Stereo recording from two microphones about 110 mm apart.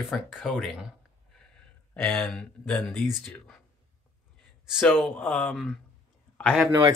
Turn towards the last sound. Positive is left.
turn(degrees=10)  # may be behind; listen again after turning